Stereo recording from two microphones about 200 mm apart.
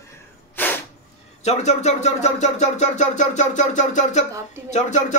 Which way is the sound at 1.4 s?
35° left (ahead or behind).